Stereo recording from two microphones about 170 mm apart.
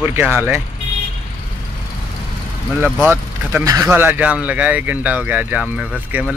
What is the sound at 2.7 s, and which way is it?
Speech, 10° right (ahead or behind).